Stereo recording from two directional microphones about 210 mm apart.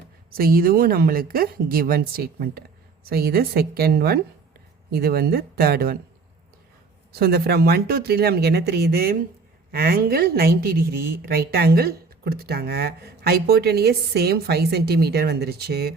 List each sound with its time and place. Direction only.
0.3 s a woman's voice: 45° right (ahead or behind)
7.2 s a woman's voice: 50° right (ahead or behind)